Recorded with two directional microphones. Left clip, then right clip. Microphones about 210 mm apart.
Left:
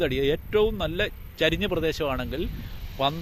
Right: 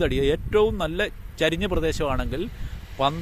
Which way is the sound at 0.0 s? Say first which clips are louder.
Right 2 dB; 15° right (ahead or behind).